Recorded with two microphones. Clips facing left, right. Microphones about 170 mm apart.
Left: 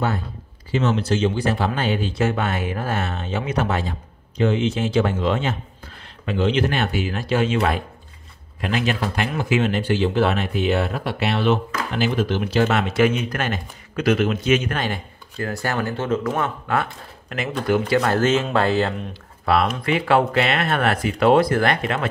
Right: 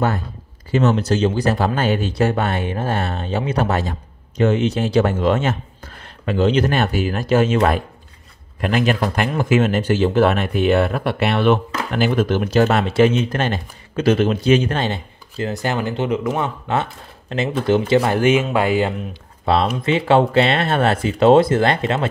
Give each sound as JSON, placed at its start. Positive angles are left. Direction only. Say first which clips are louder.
{"t": 0.7, "sound": "speech", "louder": "right 4 dB", "side_deg": -45}
{"t": 19.4, "sound": "speech", "louder": "right 2 dB", "side_deg": -25}